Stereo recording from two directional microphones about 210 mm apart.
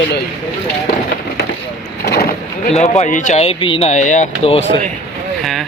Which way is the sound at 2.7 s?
30° left (ahead or behind).